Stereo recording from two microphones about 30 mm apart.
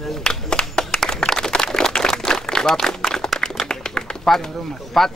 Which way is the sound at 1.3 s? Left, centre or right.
Left.